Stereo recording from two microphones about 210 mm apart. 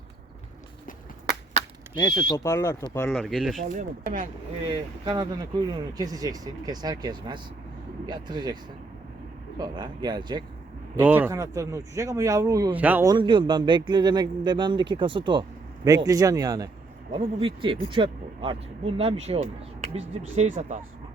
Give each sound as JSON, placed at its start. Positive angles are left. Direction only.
{"t": 2.0, "sound": "speech", "side_deg": 15}
{"t": 3.2, "sound": "speech", "side_deg": 0}
{"t": 3.6, "sound": "speech", "side_deg": -40}
{"t": 4.6, "sound": "speech", "side_deg": -20}
{"t": 9.6, "sound": "speech", "side_deg": -20}
{"t": 10.9, "sound": "speech", "side_deg": -10}